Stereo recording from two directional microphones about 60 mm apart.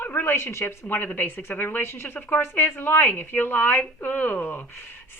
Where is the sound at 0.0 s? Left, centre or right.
Left.